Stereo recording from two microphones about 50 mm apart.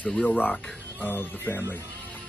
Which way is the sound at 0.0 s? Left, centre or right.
Left.